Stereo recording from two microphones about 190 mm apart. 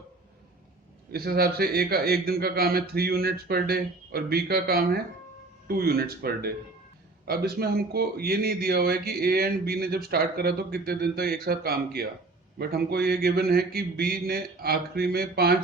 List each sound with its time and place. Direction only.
1.1 s a man's voice: 55° right (ahead or behind)